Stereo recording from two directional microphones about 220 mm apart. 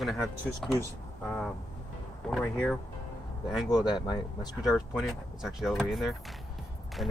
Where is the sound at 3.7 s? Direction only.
20° left (ahead or behind).